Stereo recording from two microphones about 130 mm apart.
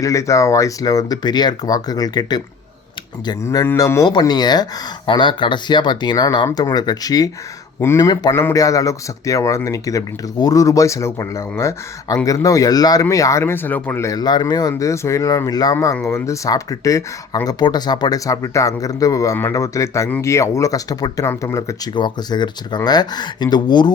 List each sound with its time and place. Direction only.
0.0 s a man's voice: 25° left (ahead or behind)
3.4 s a man's voice: 25° left (ahead or behind)
8.3 s a man's voice: 20° left (ahead or behind)
21.9 s speech: 35° left (ahead or behind)